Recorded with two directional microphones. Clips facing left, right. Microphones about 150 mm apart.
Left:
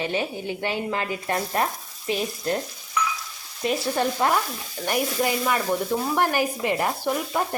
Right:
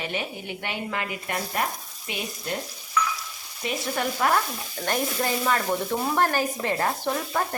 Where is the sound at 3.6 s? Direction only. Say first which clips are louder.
Left 4 dB; 30° left (ahead or behind).